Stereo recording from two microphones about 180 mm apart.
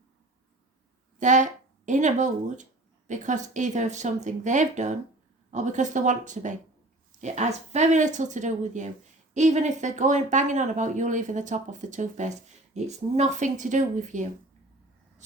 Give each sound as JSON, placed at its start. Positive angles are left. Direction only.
{"t": 1.2, "sound": "speech", "side_deg": -45}